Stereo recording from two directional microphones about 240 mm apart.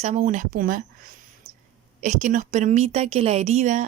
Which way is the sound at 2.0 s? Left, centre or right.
Right.